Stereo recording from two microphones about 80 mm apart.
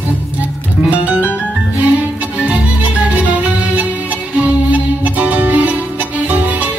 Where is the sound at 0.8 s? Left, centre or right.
Centre.